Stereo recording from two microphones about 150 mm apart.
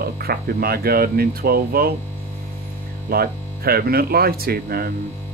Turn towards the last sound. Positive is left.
turn(degrees=-90)